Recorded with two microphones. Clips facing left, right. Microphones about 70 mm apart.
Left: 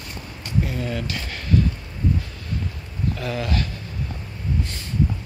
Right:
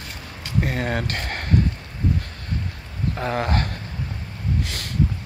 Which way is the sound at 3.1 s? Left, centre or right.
Right.